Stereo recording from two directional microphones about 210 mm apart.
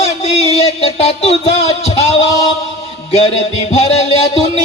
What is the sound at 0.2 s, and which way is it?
Music, 30° left (ahead or behind).